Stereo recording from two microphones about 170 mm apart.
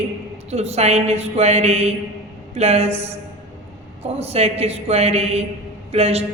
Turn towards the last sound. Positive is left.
turn(degrees=-40)  # may be behind; listen again after turning